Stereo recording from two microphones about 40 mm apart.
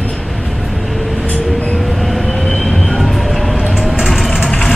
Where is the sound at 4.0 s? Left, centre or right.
Centre.